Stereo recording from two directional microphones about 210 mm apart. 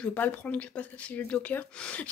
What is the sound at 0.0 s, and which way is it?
Speech, 10° left (ahead or behind).